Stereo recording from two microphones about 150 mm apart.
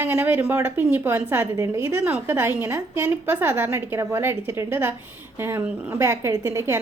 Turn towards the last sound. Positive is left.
turn(degrees=-20)  # may be behind; listen again after turning